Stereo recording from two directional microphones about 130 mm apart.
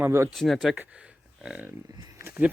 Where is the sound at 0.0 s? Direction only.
20° right (ahead or behind).